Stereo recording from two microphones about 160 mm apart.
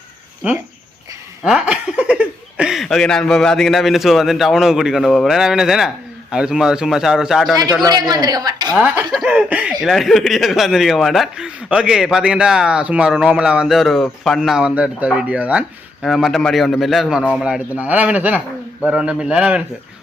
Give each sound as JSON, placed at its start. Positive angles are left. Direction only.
{"t": 1.5, "sound": "speech", "side_deg": -5}
{"t": 7.9, "sound": "a woman's voice", "side_deg": -25}
{"t": 8.7, "sound": "a man's voice", "side_deg": -10}